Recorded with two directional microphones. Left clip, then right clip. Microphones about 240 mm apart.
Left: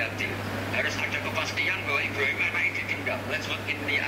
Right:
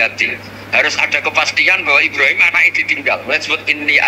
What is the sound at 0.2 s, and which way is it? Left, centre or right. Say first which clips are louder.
A man's voice: right 12 dB; right.